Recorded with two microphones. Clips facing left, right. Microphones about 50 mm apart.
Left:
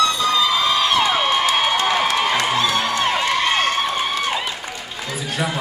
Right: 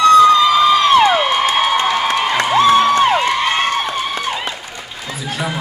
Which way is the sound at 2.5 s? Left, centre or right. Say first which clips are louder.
Right 9 dB; right.